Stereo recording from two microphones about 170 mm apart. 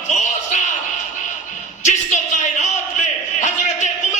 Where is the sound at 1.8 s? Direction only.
45° left (ahead or behind).